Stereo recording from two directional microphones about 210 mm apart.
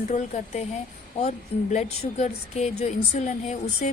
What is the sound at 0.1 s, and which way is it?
A woman's voice, 35° left (ahead or behind).